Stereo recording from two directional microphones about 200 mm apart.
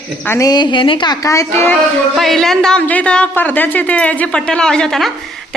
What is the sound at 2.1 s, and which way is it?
Speech, centre (ahead or behind).